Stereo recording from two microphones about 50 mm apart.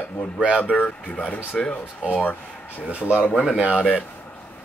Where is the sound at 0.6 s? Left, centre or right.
Left.